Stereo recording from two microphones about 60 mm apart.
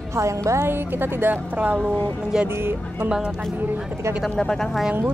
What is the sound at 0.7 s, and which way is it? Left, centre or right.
A woman's voice, right.